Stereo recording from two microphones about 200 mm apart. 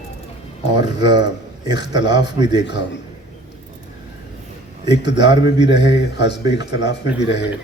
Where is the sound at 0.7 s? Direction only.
20° right (ahead or behind).